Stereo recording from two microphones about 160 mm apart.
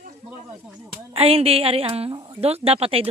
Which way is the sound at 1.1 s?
35° right (ahead or behind).